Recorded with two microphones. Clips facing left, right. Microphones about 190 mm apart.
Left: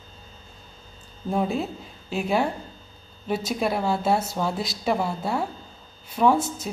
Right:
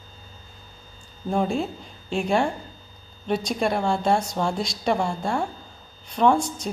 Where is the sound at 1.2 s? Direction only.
5° left (ahead or behind).